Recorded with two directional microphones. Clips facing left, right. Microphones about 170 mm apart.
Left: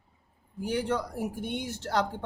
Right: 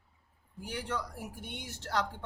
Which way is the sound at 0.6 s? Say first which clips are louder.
Left 8 dB; 25° left (ahead or behind).